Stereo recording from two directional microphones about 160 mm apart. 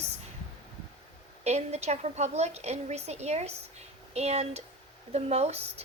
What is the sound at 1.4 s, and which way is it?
A woman's voice, 40° right (ahead or behind).